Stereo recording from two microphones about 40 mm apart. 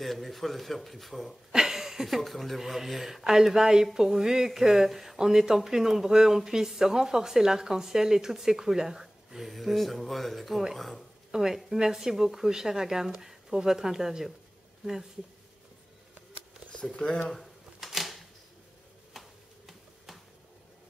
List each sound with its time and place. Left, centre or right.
0.0 s speech: centre
1.5 s speech: centre
5.2 s speech: centre
11.3 s speech: centre
16.9 s speech: left
17.7 s camera: centre
19.1 s tick-tock: centre